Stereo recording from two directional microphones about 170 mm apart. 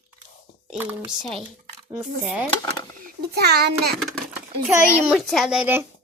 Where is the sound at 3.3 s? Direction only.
75° right (ahead or behind).